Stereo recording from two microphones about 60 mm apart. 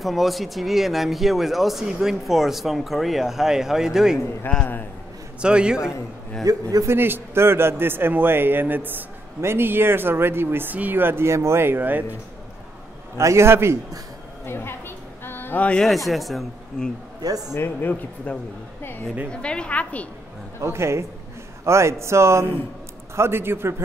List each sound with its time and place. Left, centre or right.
0.0 s speech: centre
4.5 s a woman's voice: left
5.4 s a man's voice: centre
6.4 s a man's voice: right
6.9 s speech: right
11.2 s speech: right
13.2 s speech: right
14.4 s a sound: left
15.8 s speech: centre
17.2 s a man's voice: right
17.6 s speech: left
19.3 s a woman's voice: centre
20.6 s speech: right